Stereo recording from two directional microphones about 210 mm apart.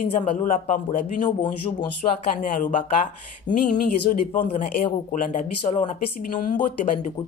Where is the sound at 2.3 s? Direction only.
40° left (ahead or behind).